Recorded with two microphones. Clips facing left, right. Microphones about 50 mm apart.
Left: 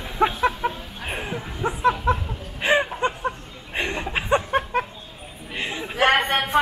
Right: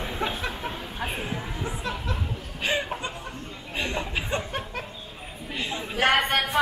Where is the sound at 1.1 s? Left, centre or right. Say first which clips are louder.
Left 6 dB; left.